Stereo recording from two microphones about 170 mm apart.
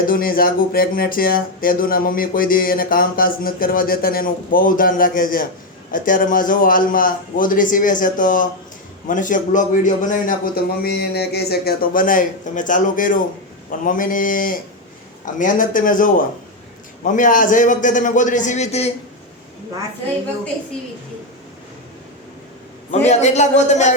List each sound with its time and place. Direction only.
0.1 s a man's voice: 60° left (ahead or behind); by 18.9 s 40° left (ahead or behind)
22.9 s a man's voice: 40° left (ahead or behind)